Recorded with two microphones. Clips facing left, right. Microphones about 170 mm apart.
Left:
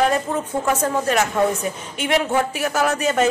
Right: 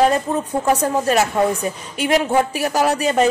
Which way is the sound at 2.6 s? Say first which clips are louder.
Right 2 dB; 35° right (ahead or behind).